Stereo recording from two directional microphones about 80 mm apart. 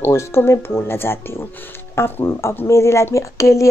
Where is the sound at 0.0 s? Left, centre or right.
Left.